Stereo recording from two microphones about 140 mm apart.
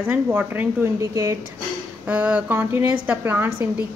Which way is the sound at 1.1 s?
20° right (ahead or behind).